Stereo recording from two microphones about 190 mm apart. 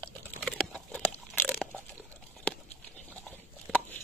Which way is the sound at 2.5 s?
5° left (ahead or behind).